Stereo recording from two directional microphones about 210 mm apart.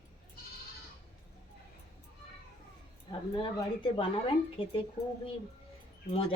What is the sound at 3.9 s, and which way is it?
Speech, 25° left (ahead or behind).